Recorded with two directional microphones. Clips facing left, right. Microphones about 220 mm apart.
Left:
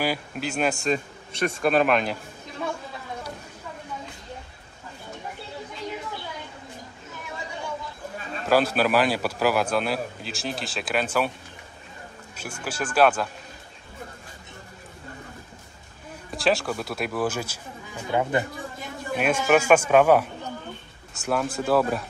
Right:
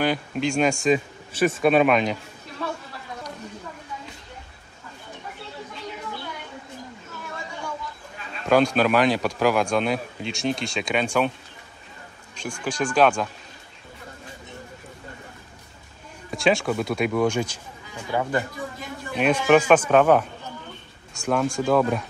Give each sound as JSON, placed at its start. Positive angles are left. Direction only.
{"t": 0.0, "sound": "speech", "side_deg": 5}
{"t": 8.5, "sound": "speech", "side_deg": 5}
{"t": 12.4, "sound": "speech", "side_deg": 5}
{"t": 16.3, "sound": "speech", "side_deg": 0}
{"t": 18.1, "sound": "speech", "side_deg": 15}
{"t": 19.1, "sound": "speech", "side_deg": 5}